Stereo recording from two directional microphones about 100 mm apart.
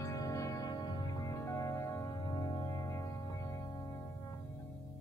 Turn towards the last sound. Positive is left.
turn(degrees=35)  # may be behind; listen again after turning